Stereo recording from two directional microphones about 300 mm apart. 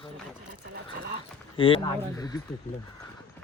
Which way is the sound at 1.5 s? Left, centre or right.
Centre.